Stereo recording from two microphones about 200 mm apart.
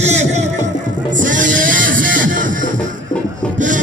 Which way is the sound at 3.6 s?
40° right (ahead or behind).